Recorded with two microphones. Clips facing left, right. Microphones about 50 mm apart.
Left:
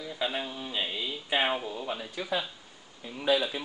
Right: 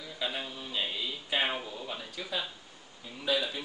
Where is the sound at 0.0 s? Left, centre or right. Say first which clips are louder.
Left 4 dB; centre.